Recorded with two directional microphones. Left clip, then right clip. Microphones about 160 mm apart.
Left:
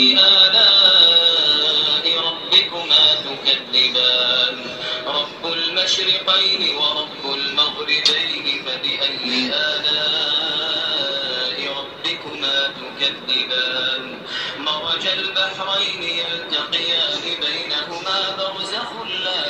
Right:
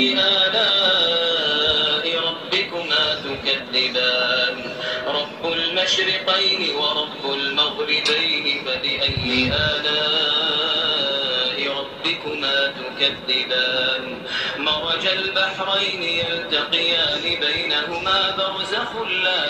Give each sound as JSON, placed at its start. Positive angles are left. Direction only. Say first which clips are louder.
{"t": 0.0, "sound": "music", "louder": "left 6 dB", "side_deg": 5}
{"t": 14.6, "sound": "a man's voice", "louder": "even", "side_deg": -20}